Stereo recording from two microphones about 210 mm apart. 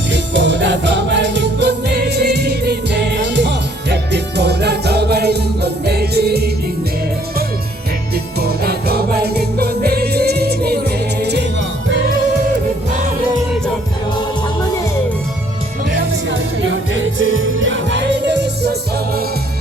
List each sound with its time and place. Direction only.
0.1 s music: 60° right (ahead or behind)
8.1 s music: 50° right (ahead or behind)
16.6 s music: 65° right (ahead or behind)